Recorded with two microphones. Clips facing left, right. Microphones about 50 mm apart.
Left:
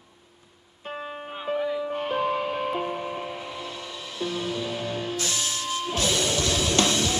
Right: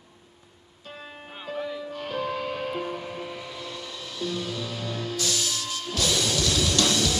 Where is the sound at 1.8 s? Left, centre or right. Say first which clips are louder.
Left 5 dB; left.